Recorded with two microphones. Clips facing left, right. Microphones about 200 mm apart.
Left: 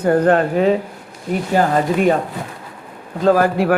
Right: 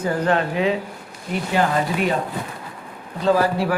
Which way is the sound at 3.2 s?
50° left (ahead or behind).